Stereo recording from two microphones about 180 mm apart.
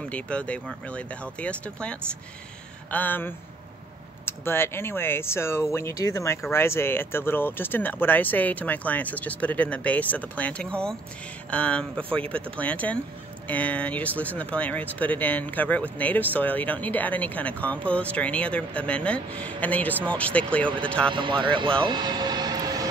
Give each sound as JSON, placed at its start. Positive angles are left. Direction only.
{"t": 0.1, "sound": "speech", "side_deg": 5}
{"t": 21.1, "sound": "speech", "side_deg": -25}
{"t": 21.8, "sound": "vehicle", "side_deg": -25}